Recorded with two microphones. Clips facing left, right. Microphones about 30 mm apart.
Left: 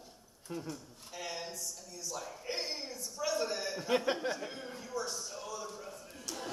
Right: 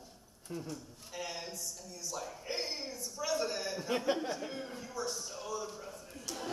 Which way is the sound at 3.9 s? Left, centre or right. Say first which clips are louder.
Left 2 dB; left.